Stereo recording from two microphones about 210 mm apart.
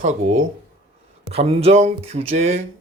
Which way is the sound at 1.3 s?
30° right (ahead or behind).